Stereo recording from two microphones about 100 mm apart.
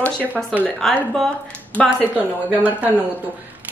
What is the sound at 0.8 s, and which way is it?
Speech, 5° left (ahead or behind).